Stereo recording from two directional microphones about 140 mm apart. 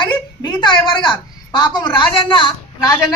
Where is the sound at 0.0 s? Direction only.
30° left (ahead or behind).